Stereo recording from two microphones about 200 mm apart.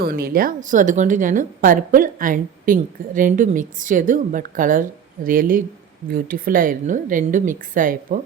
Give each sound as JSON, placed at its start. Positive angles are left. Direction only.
{"t": 0.0, "sound": "a woman's voice", "side_deg": -50}